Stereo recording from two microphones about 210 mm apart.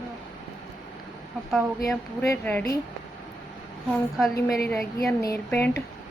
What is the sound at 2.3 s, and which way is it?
Speech, 10° left (ahead or behind).